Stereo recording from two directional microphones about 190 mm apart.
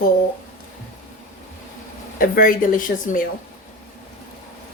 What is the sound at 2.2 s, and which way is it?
A woman's voice, 45° left (ahead or behind).